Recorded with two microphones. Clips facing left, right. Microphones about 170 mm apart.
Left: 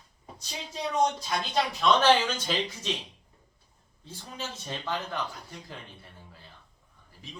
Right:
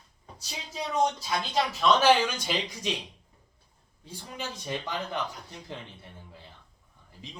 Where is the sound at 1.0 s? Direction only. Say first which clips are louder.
Even; 5° right (ahead or behind).